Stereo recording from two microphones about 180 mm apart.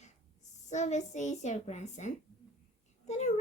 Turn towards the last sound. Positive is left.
turn(degrees=40)  # may be behind; listen again after turning